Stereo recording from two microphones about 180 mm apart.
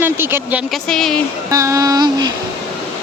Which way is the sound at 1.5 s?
15° right (ahead or behind).